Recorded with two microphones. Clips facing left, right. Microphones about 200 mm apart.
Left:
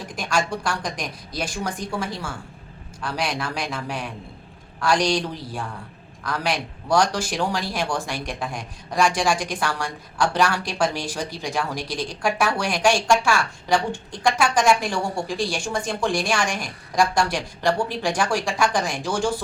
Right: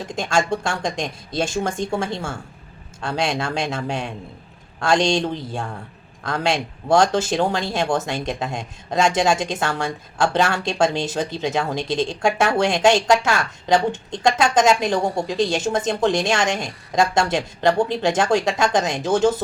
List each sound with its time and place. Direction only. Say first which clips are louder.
0.1 s speech: right 4 dB; 25° right (ahead or behind)